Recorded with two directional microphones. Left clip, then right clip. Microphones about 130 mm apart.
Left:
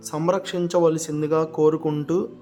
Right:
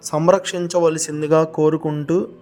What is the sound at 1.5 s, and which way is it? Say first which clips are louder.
Speech: right 2 dB; 15° right (ahead or behind).